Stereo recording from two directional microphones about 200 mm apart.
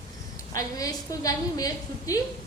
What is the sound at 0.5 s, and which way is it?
A woman's voice, 20° left (ahead or behind).